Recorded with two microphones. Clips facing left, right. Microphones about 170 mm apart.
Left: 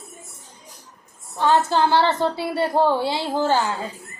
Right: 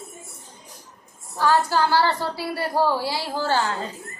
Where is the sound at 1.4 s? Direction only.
20° left (ahead or behind).